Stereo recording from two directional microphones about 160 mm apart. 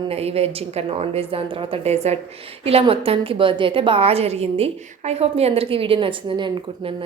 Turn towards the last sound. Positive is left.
turn(degrees=-35)  # may be behind; listen again after turning